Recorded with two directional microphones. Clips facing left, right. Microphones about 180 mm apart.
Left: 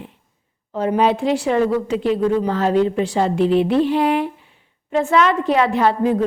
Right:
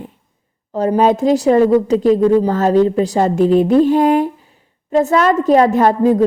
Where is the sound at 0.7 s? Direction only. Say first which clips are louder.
Right 4 dB; 40° right (ahead or behind).